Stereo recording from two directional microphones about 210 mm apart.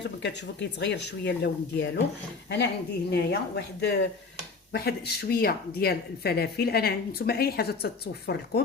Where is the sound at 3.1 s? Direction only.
50° left (ahead or behind).